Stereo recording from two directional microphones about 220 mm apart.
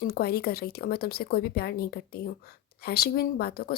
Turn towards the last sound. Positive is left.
turn(degrees=45)  # may be behind; listen again after turning